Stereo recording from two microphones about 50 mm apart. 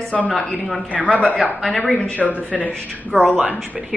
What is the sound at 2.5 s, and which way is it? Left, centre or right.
Speech, centre.